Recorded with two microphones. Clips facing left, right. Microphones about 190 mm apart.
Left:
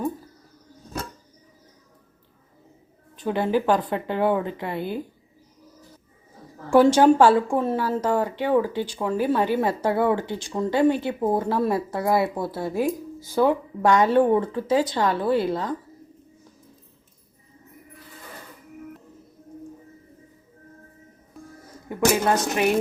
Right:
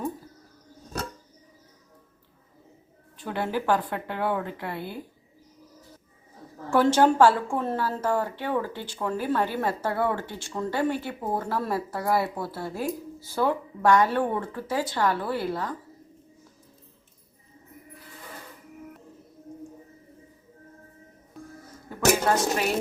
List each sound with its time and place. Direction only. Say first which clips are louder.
3.2 s a woman's voice: left 5 dB; 20° left (ahead or behind)
6.7 s speech: left 5 dB; 15° left (ahead or behind)